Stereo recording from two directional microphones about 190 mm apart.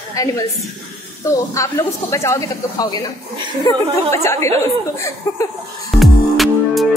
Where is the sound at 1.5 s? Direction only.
15° left (ahead or behind).